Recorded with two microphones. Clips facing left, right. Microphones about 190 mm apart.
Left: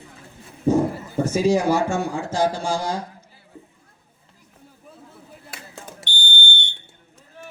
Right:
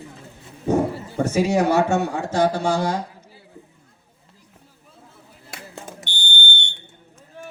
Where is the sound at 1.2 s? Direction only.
65° right (ahead or behind).